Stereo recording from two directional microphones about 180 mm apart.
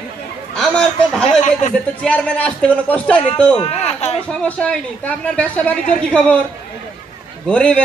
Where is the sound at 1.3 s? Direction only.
40° left (ahead or behind).